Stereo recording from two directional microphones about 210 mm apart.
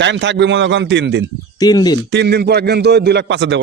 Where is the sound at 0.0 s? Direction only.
60° right (ahead or behind).